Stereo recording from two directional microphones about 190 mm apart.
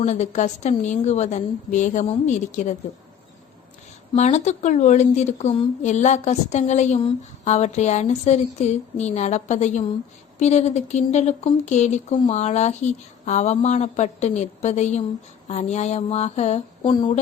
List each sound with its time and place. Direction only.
0.0 s a woman's voice: 40° left (ahead or behind)
4.1 s a woman's voice: 35° left (ahead or behind)